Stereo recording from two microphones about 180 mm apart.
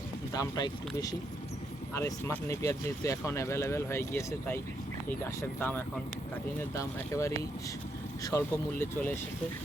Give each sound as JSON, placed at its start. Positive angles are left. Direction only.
{"t": 0.3, "sound": "speech", "side_deg": 20}